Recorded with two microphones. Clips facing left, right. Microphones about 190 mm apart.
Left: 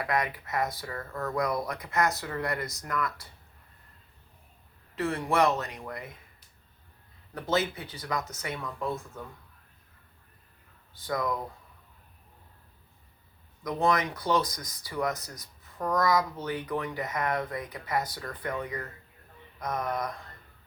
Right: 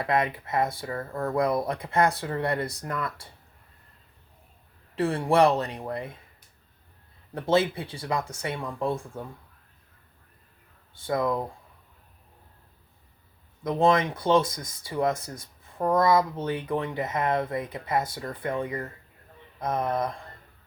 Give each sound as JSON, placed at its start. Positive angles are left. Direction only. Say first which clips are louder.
{"t": 0.0, "sound": "speech", "louder": "right 4 dB", "side_deg": -25}
{"t": 4.9, "sound": "speech", "louder": "right 5 dB", "side_deg": -30}
{"t": 7.3, "sound": "speech", "louder": "right 5 dB", "side_deg": -30}
{"t": 10.9, "sound": "speech", "louder": "right 5 dB", "side_deg": -25}
{"t": 13.7, "sound": "speech", "louder": "right 5 dB", "side_deg": -25}